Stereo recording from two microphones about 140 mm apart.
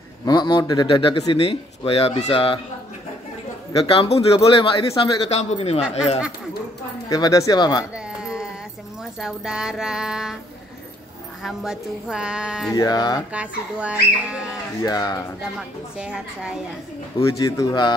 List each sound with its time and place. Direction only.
0.2 s speech: 30° left (ahead or behind)
3.8 s speech: 40° left (ahead or behind)
5.3 s a man's voice: 50° left (ahead or behind)
5.8 s speech: 5° right (ahead or behind)
7.1 s speech: 25° left (ahead or behind)
7.9 s a sound: 5° right (ahead or behind)
9.2 s speech: 5° right (ahead or behind)
11.4 s speech: 5° right (ahead or behind)
12.7 s speech: 25° left (ahead or behind)
13.3 s speech: 10° right (ahead or behind)
14.8 s speech: 30° left (ahead or behind)
16.0 s speech: 5° right (ahead or behind)
17.2 s speech: 25° left (ahead or behind)